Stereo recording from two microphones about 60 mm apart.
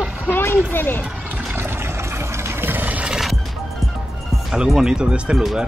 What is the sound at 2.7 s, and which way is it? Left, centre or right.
Boat, right.